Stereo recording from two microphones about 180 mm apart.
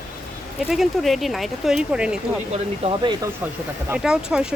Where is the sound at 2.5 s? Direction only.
30° right (ahead or behind).